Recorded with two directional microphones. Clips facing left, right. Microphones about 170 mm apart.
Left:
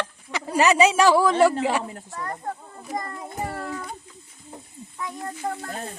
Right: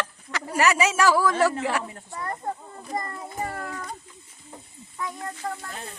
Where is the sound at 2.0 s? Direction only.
10° right (ahead or behind).